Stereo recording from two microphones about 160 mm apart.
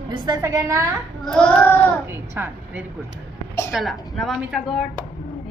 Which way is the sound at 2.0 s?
15° right (ahead or behind).